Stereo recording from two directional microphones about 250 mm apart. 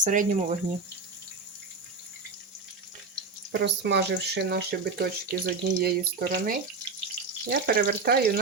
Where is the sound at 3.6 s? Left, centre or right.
Right.